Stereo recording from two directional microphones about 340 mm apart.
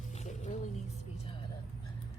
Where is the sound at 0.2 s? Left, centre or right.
Centre.